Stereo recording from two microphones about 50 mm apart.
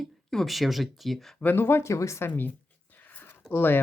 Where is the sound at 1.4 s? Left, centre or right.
Left.